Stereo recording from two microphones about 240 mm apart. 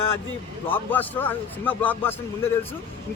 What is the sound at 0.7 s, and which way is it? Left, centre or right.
Speech, centre.